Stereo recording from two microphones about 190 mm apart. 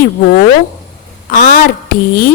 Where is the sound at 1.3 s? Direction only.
45° left (ahead or behind).